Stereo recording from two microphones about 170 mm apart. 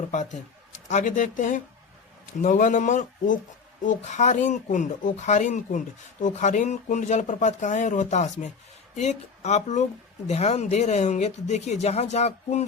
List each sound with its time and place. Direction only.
0.1 s speech: 45° left (ahead or behind)